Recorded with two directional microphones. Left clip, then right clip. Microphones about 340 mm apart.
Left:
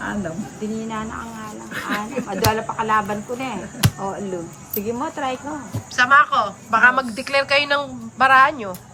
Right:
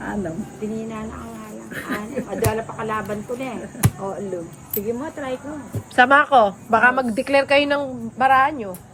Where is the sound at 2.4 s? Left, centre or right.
Left.